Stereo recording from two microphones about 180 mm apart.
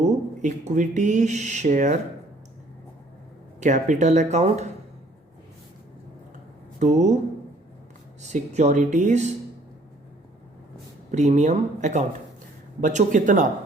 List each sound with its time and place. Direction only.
0.0 s speech: 40° right (ahead or behind)
3.6 s speech: 40° right (ahead or behind)
6.7 s speech: 40° right (ahead or behind)
8.2 s speech: 40° right (ahead or behind)
11.1 s speech: 40° right (ahead or behind)